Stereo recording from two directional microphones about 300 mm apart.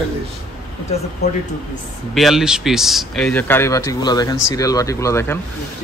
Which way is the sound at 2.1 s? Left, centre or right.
Centre.